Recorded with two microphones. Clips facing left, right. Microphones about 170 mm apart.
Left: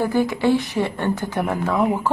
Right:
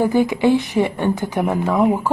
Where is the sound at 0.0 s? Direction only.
15° right (ahead or behind).